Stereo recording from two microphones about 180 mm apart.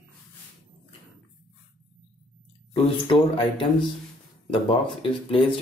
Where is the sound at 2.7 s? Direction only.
30° left (ahead or behind).